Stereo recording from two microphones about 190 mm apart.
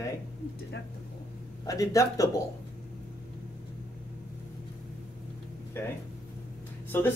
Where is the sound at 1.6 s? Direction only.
15° left (ahead or behind).